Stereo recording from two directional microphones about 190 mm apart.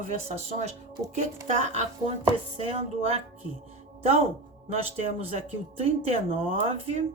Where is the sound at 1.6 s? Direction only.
35° right (ahead or behind).